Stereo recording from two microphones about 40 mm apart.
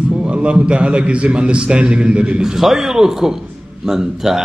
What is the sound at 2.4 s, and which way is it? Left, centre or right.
A man's voice, centre.